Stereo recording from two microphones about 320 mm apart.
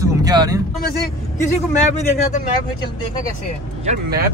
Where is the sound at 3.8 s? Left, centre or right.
Right.